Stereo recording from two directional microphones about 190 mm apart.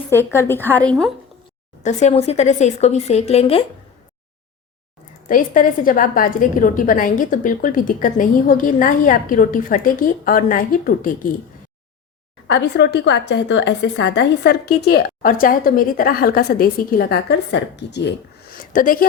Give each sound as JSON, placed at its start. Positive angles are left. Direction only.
{"t": 0.3, "sound": "a woman's voice", "side_deg": 10}
{"t": 1.8, "sound": "speech", "side_deg": 40}
{"t": 5.3, "sound": "a woman's voice", "side_deg": 45}
{"t": 12.5, "sound": "a woman's voice", "side_deg": 65}
{"t": 18.5, "sound": "a sound", "side_deg": 45}